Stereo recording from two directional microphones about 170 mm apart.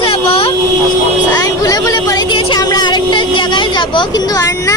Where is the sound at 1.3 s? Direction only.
20° left (ahead or behind).